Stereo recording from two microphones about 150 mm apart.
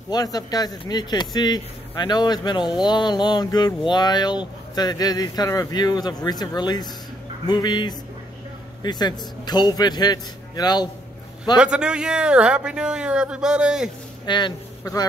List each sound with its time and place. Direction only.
0.1 s speech: 25° left (ahead or behind)
11.5 s a man's voice: 5° right (ahead or behind)
14.2 s speech: 30° left (ahead or behind)